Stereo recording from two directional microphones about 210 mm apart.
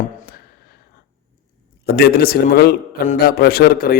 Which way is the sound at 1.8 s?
50° left (ahead or behind).